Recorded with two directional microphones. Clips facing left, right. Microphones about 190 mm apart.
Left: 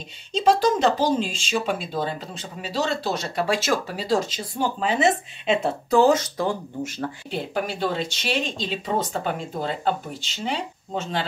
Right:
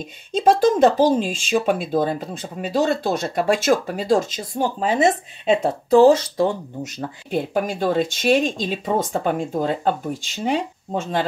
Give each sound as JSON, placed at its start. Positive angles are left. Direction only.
{"t": 0.3, "sound": "speech", "side_deg": -50}
{"t": 7.2, "sound": "speech", "side_deg": -50}